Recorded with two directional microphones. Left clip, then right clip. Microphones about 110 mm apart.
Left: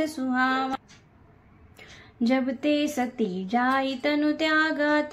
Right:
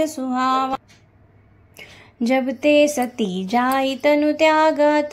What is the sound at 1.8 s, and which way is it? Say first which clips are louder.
A woman's voice: right 4 dB; 50° right (ahead or behind).